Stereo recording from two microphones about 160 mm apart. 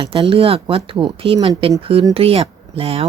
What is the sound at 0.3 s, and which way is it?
Speech, 40° right (ahead or behind).